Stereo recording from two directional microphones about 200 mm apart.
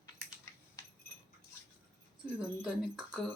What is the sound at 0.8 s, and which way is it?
Keys jangling, 15° left (ahead or behind).